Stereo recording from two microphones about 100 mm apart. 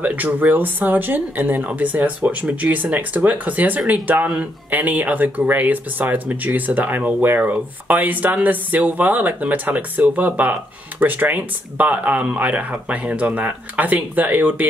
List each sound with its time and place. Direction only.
0.0 s speech: 15° right (ahead or behind)